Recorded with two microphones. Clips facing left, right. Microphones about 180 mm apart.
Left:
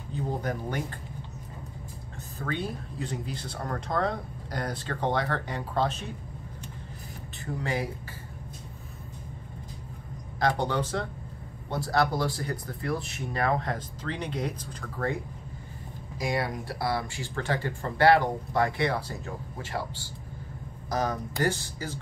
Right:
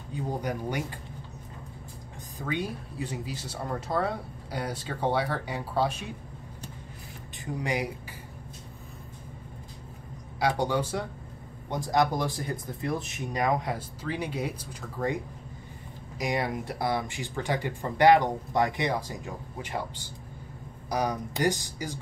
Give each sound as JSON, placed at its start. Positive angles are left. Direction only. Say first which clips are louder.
{"t": 0.1, "sound": "speech", "louder": "even", "side_deg": -10}
{"t": 2.3, "sound": "speech", "louder": "right 1 dB", "side_deg": -10}
{"t": 7.4, "sound": "speech", "louder": "right 1 dB", "side_deg": -15}
{"t": 10.4, "sound": "speech", "louder": "even", "side_deg": -10}
{"t": 16.2, "sound": "speech", "louder": "right 1 dB", "side_deg": -20}